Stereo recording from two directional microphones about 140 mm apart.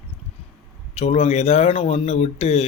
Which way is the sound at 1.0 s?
50° left (ahead or behind).